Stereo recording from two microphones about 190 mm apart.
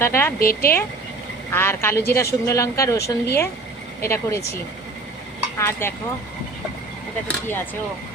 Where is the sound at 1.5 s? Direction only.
10° left (ahead or behind).